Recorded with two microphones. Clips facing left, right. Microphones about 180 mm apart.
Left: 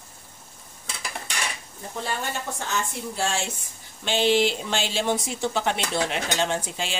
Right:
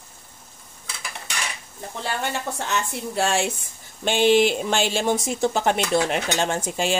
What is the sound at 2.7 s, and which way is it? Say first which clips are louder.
Speech: right 2 dB; 65° right (ahead or behind).